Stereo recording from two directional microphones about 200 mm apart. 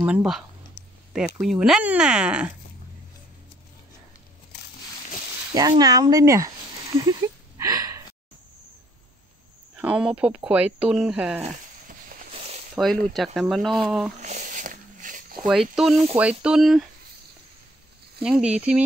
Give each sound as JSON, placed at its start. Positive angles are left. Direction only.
{"t": 0.0, "sound": "speech", "side_deg": -5}
{"t": 5.5, "sound": "speech", "side_deg": -20}
{"t": 7.1, "sound": "a sound", "side_deg": -15}
{"t": 9.8, "sound": "speech", "side_deg": -5}
{"t": 12.7, "sound": "speech", "side_deg": 0}
{"t": 14.2, "sound": "a sound", "side_deg": -40}
{"t": 15.4, "sound": "speech", "side_deg": 0}
{"t": 18.2, "sound": "speech", "side_deg": -5}